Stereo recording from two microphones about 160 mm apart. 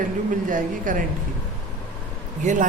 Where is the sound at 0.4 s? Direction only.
55° right (ahead or behind).